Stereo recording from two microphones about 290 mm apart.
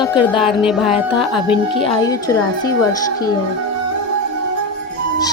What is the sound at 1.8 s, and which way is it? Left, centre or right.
Speech, centre.